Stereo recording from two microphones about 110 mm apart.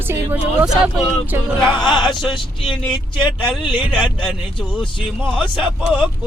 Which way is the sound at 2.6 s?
45° left (ahead or behind).